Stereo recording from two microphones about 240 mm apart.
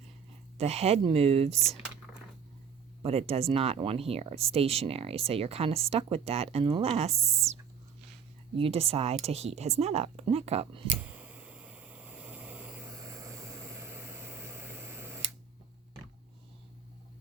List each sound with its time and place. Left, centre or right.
0.6 s speech: right
3.0 s speech: right
8.5 s speech: right
11.0 s a sound: centre